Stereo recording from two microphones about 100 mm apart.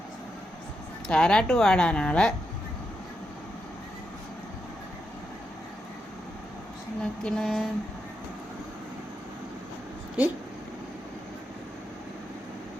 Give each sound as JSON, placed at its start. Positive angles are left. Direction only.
{"t": 1.0, "sound": "a woman's voice", "side_deg": 10}
{"t": 7.0, "sound": "a woman's voice", "side_deg": 10}
{"t": 10.2, "sound": "speech", "side_deg": -20}